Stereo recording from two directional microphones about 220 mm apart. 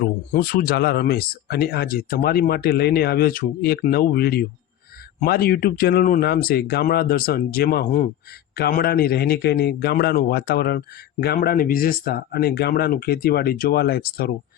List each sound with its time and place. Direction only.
0.0 s a man's voice: 40° left (ahead or behind)